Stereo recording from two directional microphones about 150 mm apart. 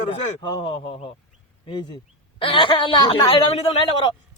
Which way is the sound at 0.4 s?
35° left (ahead or behind).